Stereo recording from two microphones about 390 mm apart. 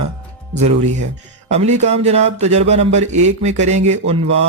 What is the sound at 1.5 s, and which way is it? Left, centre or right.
Speech, centre.